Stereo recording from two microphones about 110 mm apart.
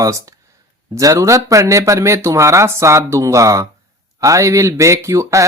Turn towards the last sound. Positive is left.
turn(degrees=-30)  # may be behind; listen again after turning